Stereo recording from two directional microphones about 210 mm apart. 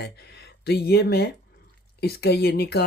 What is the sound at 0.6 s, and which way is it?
Speech, 50° left (ahead or behind).